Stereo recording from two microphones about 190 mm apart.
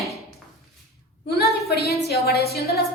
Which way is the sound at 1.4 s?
55° left (ahead or behind).